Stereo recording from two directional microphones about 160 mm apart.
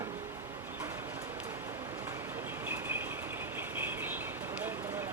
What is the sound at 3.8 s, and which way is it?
Bird, 10° right (ahead or behind).